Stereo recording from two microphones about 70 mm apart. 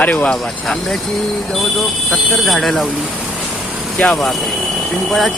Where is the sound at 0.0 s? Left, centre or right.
Left.